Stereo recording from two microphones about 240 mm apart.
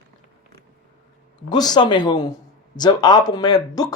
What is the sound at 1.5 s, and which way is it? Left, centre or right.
Speech, centre.